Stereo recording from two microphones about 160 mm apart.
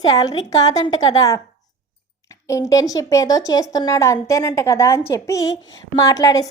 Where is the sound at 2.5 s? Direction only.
20° left (ahead or behind).